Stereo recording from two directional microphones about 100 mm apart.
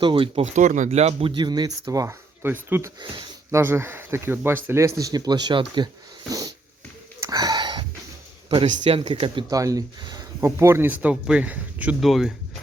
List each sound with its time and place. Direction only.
0.0 s speech: 60° right (ahead or behind)
0.9 s speech: 90° right; by 1.7 s 45° right (ahead or behind)
1.8 s speech: 30° right (ahead or behind); by 5.9 s 50° right (ahead or behind)
7.3 s a sound: 40° right (ahead or behind)
8.4 s speech: 60° right (ahead or behind)
9.5 s speech: 35° right (ahead or behind)
10.0 s a sound: 45° right (ahead or behind)
10.4 s speech: 30° right (ahead or behind)
11.9 s speech: centre (ahead or behind)